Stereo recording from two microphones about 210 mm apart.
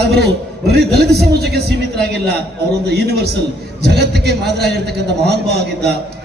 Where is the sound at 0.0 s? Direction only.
50° right (ahead or behind).